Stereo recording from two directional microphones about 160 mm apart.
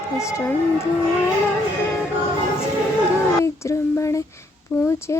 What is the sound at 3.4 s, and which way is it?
Child singing, 20° left (ahead or behind).